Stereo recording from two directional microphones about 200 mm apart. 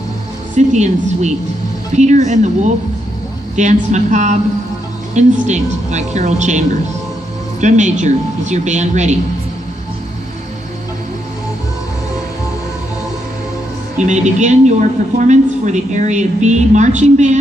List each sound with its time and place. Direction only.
0.6 s a woman's voice: 35° right (ahead or behind)
13.9 s a woman's voice: 35° right (ahead or behind)